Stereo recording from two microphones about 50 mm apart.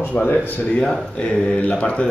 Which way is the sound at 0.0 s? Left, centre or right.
Left.